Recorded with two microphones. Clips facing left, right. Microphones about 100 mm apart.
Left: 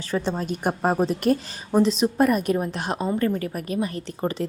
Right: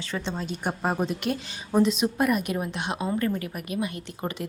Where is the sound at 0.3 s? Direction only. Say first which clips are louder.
Left 5 dB; 45° left (ahead or behind).